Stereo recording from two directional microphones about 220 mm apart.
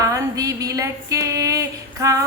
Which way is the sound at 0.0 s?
15° right (ahead or behind).